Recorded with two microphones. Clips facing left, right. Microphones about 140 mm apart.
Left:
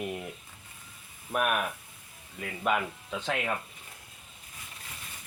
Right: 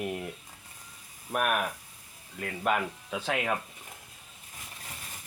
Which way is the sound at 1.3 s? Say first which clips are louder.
Even; centre (ahead or behind).